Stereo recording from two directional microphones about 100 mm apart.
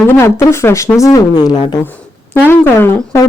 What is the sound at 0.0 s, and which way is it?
Speech, 25° left (ahead or behind).